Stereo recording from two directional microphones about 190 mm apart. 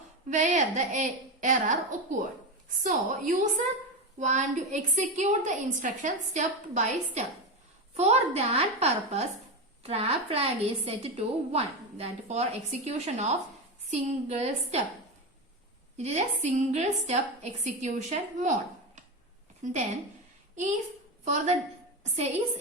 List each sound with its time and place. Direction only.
0.3 s a woman's voice: 40° right (ahead or behind)
16.0 s a woman's voice: 35° right (ahead or behind)
19.6 s a woman's voice: 45° right (ahead or behind)
21.2 s a woman's voice: 35° right (ahead or behind)